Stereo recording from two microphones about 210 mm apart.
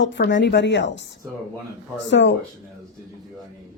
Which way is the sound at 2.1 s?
55° left (ahead or behind).